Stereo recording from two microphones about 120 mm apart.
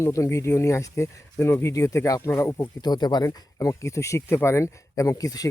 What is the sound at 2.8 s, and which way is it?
Speech, 35° left (ahead or behind).